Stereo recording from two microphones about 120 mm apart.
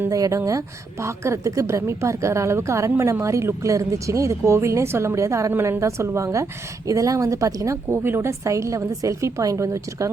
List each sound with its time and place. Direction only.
0.1 s a woman's voice: 30° right (ahead or behind)